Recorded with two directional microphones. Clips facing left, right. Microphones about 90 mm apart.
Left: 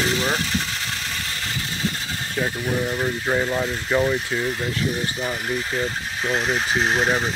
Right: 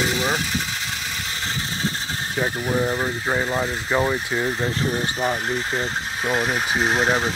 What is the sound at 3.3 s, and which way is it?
Speech, 5° right (ahead or behind).